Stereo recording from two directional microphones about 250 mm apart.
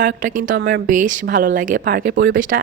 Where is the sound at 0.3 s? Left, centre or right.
Right.